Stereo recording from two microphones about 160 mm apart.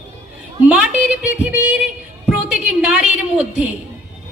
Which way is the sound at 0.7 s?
5° right (ahead or behind).